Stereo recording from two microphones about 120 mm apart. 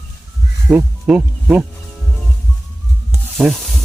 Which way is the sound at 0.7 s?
20° right (ahead or behind).